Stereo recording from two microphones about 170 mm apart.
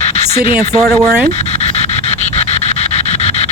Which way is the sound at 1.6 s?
40° left (ahead or behind).